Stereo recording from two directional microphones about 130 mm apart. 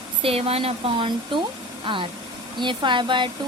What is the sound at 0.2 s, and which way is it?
Speech, 50° right (ahead or behind).